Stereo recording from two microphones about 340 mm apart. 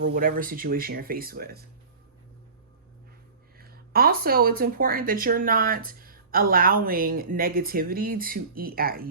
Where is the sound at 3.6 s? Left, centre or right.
Right.